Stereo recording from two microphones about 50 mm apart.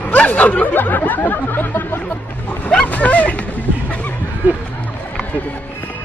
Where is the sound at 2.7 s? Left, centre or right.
Left.